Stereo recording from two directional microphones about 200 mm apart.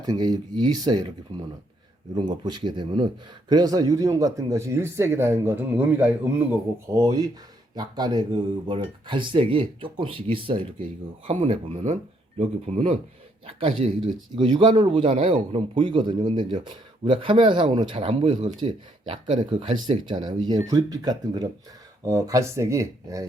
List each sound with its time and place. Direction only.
0.0 s speech: 20° right (ahead or behind)
2.1 s a man's voice: 20° right (ahead or behind)